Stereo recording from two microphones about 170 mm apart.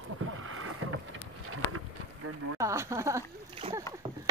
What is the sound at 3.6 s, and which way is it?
Speech, 30° right (ahead or behind).